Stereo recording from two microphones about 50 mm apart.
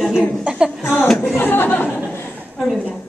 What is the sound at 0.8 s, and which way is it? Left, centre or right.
Speech, left.